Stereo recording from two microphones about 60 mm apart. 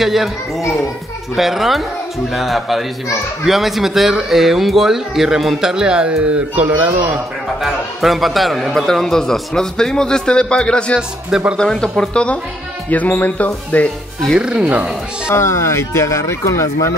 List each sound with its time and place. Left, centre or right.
0.0 s a man's voice: centre
1.3 s a man's voice: centre; by 6.9 s right
7.6 s a man's voice: centre
11.0 s speech: centre
11.5 s a man's voice: centre
12.9 s speech: left
14.4 s speech: centre
15.2 s speech: left